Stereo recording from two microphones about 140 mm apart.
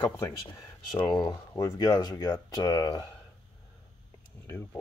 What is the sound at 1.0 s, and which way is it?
Speech, 30° left (ahead or behind).